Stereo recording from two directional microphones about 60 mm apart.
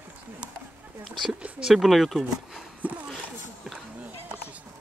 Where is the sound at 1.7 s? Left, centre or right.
Centre.